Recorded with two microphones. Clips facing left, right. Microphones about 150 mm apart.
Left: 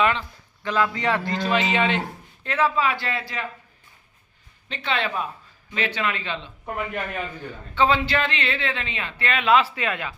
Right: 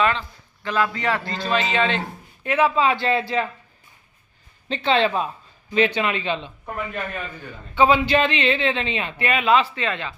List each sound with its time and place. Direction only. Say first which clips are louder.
0.0 s a man's voice: right 1 dB; 15° left (ahead or behind)
2.4 s speech: right 3 dB; 15° right (ahead or behind)
4.7 s speech: right 7 dB; 30° right (ahead or behind)
7.8 s speech: right 4 dB; 15° right (ahead or behind); by 10.2 s 10° left (ahead or behind)